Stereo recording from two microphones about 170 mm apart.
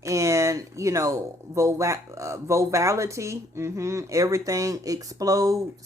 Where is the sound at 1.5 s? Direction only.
15° right (ahead or behind).